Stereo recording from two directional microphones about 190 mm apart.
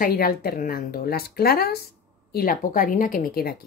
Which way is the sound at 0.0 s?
50° left (ahead or behind).